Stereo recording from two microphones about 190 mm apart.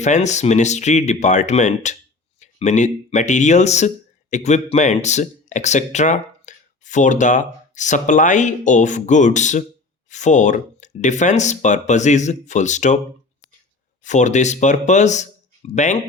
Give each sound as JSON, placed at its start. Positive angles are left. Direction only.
{"t": 0.0, "sound": "speech", "side_deg": 40}
{"t": 14.0, "sound": "speech", "side_deg": 40}